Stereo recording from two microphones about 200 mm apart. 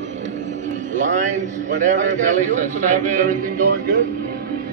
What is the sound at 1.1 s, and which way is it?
A man's voice, 40° right (ahead or behind).